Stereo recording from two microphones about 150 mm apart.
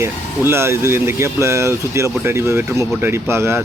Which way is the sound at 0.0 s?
15° right (ahead or behind).